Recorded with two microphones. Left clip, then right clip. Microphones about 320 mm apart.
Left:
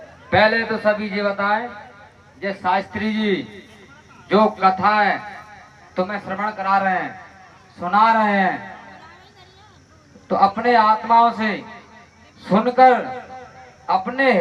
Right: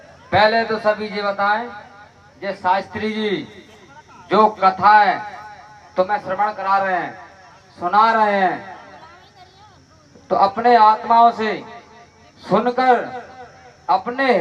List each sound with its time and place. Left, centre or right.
0.3 s a man's voice: centre
4.3 s a man's voice: right
10.2 s a man's voice: centre